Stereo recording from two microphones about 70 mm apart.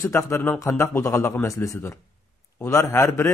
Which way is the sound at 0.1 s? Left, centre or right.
Left.